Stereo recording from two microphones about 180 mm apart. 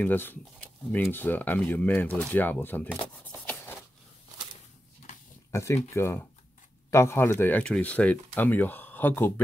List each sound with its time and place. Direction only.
0.0 s speech: 10° left (ahead or behind)
5.5 s speech: 15° left (ahead or behind)